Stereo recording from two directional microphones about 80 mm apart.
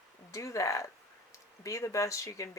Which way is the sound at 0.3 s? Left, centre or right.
Left.